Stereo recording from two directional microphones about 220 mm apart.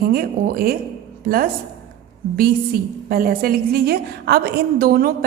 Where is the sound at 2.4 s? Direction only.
40° right (ahead or behind).